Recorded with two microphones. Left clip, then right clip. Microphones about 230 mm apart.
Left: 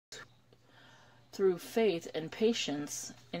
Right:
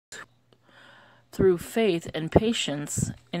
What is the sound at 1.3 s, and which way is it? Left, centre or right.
Speech, right.